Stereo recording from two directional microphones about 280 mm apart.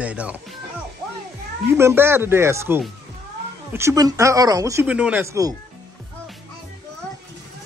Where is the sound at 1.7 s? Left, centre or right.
Centre.